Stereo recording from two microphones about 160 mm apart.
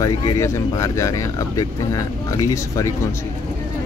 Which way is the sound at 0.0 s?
20° left (ahead or behind).